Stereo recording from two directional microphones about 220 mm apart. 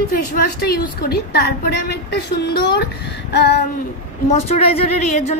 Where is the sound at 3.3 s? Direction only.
50° left (ahead or behind).